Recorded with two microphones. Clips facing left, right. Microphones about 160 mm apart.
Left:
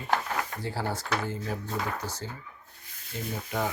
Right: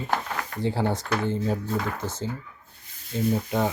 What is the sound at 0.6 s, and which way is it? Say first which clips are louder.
Speech: right 7 dB; 25° right (ahead or behind).